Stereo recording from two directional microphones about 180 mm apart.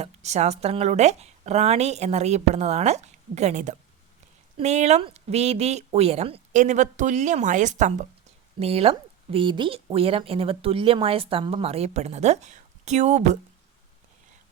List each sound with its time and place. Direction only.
0.0 s speech: 40° right (ahead or behind)